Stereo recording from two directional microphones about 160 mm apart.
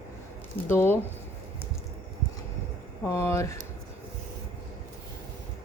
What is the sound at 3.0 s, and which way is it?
Speech, 15° left (ahead or behind).